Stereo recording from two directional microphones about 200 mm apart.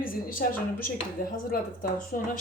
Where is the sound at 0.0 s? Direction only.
45° left (ahead or behind).